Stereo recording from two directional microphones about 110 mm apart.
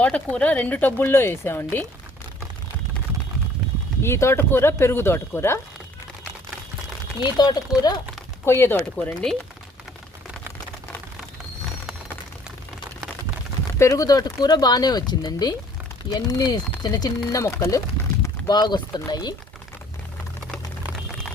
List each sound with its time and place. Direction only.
0.0 s speech: 10° left (ahead or behind)
4.0 s speech: 25° left (ahead or behind)
7.2 s speech: 40° left (ahead or behind)
8.4 s speech: 25° left (ahead or behind)
8.7 s speech: 10° left (ahead or behind)
13.7 s speech: 30° left (ahead or behind)
17.4 s a sound: 25° left (ahead or behind)
18.5 s speech: 40° left (ahead or behind)